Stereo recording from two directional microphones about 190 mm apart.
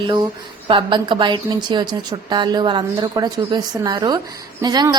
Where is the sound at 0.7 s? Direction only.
25° right (ahead or behind).